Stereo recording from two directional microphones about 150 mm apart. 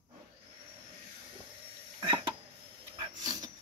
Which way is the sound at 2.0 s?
30° right (ahead or behind).